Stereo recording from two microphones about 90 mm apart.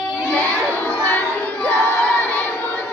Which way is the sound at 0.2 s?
15° left (ahead or behind).